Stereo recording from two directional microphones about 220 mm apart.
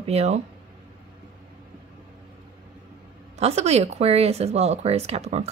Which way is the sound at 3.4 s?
30° right (ahead or behind).